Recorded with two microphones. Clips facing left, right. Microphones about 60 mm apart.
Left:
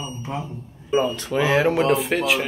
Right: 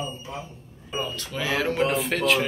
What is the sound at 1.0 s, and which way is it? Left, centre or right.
Speech, left.